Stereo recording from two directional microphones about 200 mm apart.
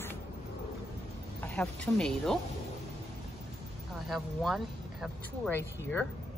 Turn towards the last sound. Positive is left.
turn(degrees=10)  # may be behind; listen again after turning